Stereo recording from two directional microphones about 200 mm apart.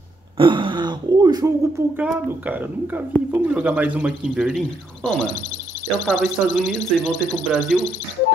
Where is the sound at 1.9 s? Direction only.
10° right (ahead or behind).